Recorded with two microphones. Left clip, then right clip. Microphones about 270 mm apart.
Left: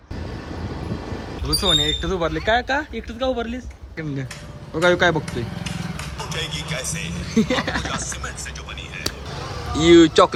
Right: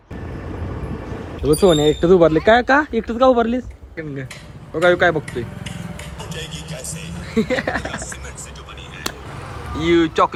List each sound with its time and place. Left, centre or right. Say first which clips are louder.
1.6 s speech: right 5 dB; right
2.4 s speech: right 7 dB; centre
4.8 s a man's voice: right 2 dB; centre
9.8 s a man's voice: left 3 dB; centre